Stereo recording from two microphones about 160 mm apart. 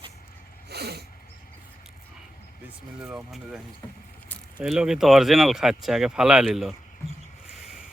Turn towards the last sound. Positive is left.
turn(degrees=0)  # may be behind; listen again after turning